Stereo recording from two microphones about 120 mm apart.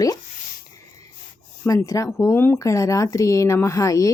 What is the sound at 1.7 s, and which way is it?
Speech, 25° left (ahead or behind).